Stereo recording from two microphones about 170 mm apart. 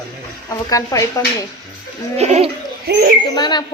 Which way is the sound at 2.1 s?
40° right (ahead or behind).